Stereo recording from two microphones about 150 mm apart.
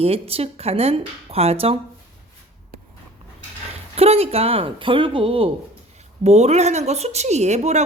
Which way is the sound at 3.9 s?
40° right (ahead or behind).